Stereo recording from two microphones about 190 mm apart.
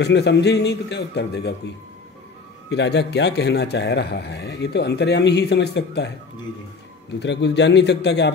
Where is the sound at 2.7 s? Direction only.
65° left (ahead or behind).